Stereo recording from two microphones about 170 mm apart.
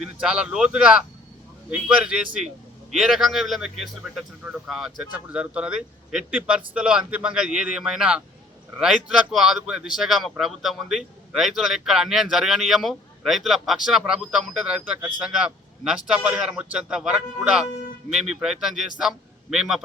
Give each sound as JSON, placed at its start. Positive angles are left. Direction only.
{"t": 0.0, "sound": "a man's voice", "side_deg": -5}